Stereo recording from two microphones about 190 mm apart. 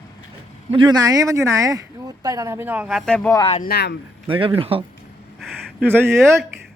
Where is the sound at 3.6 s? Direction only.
60° left (ahead or behind).